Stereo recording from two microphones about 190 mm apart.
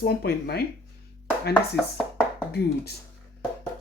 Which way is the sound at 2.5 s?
55° left (ahead or behind).